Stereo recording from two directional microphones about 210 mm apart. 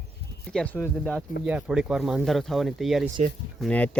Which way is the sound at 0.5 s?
5° left (ahead or behind).